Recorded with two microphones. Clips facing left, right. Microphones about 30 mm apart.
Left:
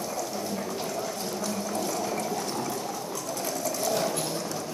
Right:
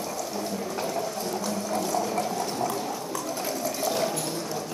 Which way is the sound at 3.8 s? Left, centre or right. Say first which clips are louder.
Right 1 dB; centre.